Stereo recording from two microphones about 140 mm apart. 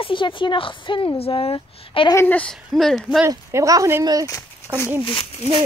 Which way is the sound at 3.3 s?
25° right (ahead or behind).